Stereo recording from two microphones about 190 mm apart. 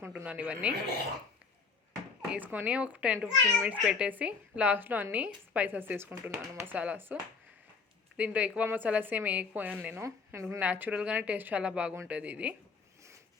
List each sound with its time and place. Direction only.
0.0 s a woman's voice: 10° right (ahead or behind)
2.3 s a woman's voice: 10° right (ahead or behind)